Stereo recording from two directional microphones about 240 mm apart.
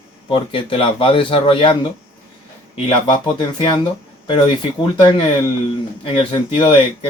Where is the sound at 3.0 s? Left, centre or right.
Centre.